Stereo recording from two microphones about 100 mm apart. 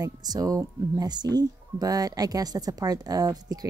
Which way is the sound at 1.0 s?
45° right (ahead or behind).